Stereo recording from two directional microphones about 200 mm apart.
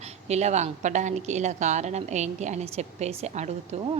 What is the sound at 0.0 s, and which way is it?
A woman's voice, 35° right (ahead or behind).